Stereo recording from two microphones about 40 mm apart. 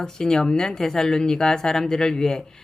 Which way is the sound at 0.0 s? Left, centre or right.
Centre.